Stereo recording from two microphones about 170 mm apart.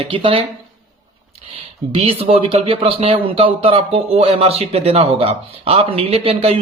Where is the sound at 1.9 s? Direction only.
35° right (ahead or behind).